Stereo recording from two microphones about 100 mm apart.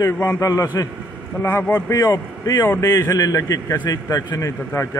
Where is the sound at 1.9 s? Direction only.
35° left (ahead or behind).